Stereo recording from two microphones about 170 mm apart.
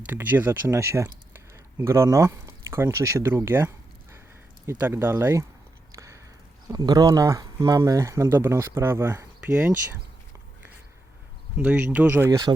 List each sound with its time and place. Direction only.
0.0 s speech: 10° right (ahead or behind)
6.7 s speech: 20° right (ahead or behind)
11.5 s speech: 10° right (ahead or behind)